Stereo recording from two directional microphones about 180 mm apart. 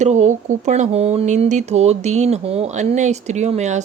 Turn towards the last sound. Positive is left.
turn(degrees=-40)  # may be behind; listen again after turning